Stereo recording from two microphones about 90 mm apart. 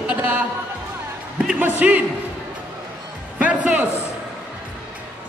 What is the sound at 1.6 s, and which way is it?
Speech, 15° right (ahead or behind).